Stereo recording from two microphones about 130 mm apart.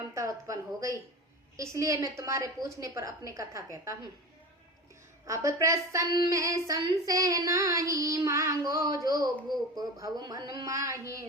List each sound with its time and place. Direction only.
0.0 s a woman's voice: 25° right (ahead or behind)
5.2 s speech: 25° right (ahead or behind)